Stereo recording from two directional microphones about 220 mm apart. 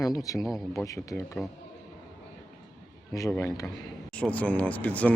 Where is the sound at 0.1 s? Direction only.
15° left (ahead or behind).